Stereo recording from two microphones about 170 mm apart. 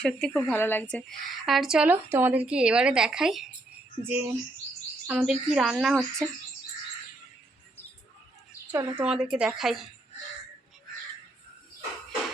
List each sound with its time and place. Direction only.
0.0 s speech: 5° left (ahead or behind)
4.1 s bird: 10° right (ahead or behind)
5.0 s speech: 5° right (ahead or behind)
8.7 s speech: 25° right (ahead or behind)
9.0 s speech: 5° right (ahead or behind)